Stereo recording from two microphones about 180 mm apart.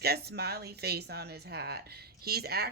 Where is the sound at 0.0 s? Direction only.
60° right (ahead or behind).